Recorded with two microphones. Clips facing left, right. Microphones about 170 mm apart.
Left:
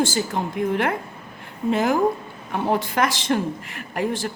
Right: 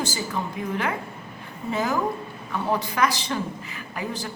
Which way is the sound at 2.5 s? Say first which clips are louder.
Left 3 dB; 60° left (ahead or behind).